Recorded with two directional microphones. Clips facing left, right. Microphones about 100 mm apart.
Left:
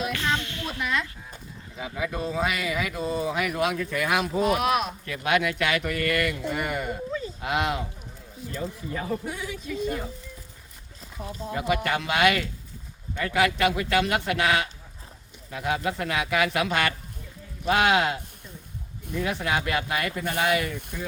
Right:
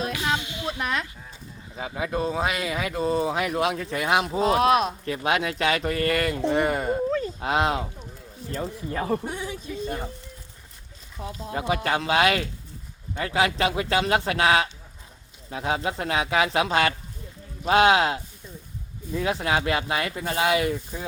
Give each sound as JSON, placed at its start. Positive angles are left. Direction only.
{"t": 0.1, "sound": "a sound", "side_deg": -15}
{"t": 1.7, "sound": "speech", "side_deg": -30}
{"t": 8.9, "sound": "speech", "side_deg": -45}
{"t": 9.2, "sound": "speech", "side_deg": -25}
{"t": 11.5, "sound": "speech", "side_deg": -30}
{"t": 19.2, "sound": "speech", "side_deg": -30}